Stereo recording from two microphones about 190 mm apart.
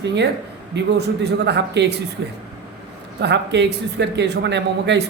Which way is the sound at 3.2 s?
65° right (ahead or behind).